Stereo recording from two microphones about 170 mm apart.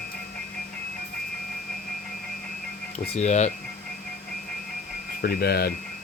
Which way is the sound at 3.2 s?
45° left (ahead or behind).